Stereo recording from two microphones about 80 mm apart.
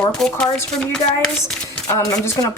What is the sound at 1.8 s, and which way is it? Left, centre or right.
Speech, left.